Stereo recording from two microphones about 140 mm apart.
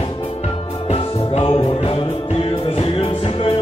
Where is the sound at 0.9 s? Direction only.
45° left (ahead or behind).